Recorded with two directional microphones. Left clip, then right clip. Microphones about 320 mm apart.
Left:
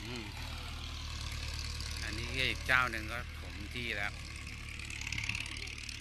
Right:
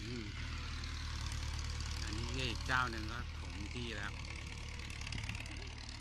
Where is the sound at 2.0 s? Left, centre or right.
Centre.